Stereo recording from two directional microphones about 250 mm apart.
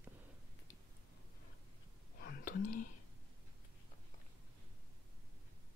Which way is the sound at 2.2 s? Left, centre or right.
Left.